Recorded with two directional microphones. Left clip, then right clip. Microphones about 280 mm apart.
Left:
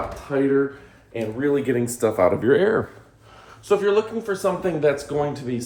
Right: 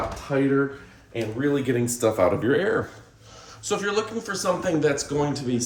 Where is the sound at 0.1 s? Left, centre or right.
Centre.